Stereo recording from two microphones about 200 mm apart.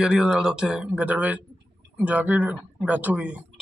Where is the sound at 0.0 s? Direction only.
5° right (ahead or behind).